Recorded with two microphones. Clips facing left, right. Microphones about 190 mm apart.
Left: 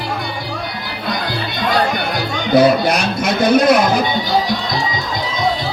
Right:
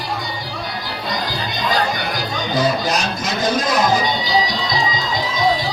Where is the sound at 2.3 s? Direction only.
65° left (ahead or behind).